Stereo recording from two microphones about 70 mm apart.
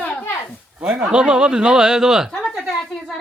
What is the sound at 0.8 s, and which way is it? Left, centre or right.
Speech, centre.